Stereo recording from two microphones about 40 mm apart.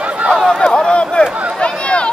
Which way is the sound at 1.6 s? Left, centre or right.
Left.